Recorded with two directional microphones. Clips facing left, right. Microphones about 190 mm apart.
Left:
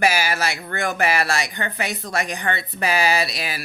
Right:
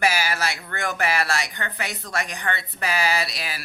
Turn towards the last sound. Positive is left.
turn(degrees=15)  # may be behind; listen again after turning